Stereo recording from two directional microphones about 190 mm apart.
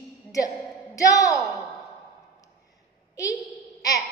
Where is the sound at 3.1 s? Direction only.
15° left (ahead or behind).